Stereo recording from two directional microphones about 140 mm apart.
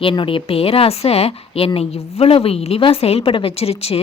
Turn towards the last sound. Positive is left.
turn(degrees=45)  # may be behind; listen again after turning